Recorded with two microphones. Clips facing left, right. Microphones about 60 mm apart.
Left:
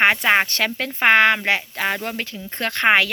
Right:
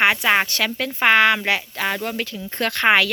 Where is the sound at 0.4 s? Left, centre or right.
Left.